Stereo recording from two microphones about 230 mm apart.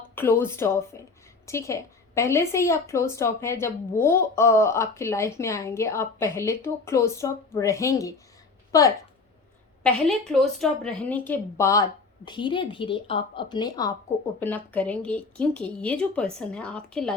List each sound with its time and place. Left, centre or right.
0.2 s a woman's voice: centre
9.8 s a woman's voice: centre